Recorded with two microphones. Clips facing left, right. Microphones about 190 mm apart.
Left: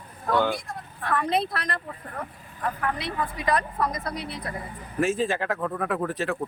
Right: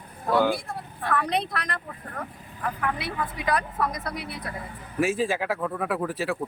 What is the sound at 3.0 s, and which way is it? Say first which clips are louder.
Speech: left 1 dB; 5° right (ahead or behind).